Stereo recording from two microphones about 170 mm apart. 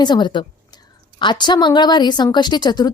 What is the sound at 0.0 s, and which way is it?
A woman's voice, 25° left (ahead or behind).